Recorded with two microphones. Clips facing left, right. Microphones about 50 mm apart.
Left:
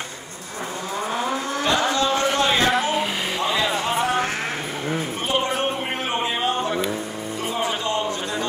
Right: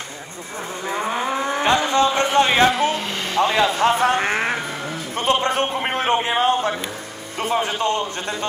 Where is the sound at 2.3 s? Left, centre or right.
Right.